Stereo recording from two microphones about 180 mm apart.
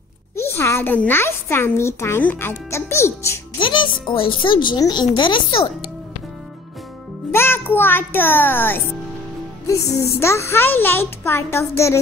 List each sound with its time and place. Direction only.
0.4 s a woman's voice: 15° left (ahead or behind)
3.5 s music: 25° left (ahead or behind)
4.1 s speech: 30° left (ahead or behind)
7.3 s a child's voice: 10° left (ahead or behind)
9.9 s a woman's voice: 15° left (ahead or behind)